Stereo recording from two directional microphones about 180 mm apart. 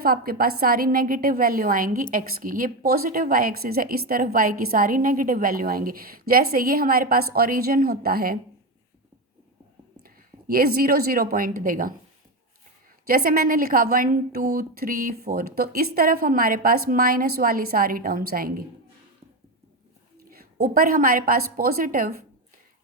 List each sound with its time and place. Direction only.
0.0 s a woman's voice: 55° right (ahead or behind)
10.0 s a woman's voice: 55° right (ahead or behind)
13.1 s a woman's voice: 55° right (ahead or behind)
20.4 s a woman's voice: 55° right (ahead or behind)